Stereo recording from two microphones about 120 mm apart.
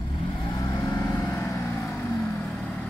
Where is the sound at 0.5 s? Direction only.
30° left (ahead or behind).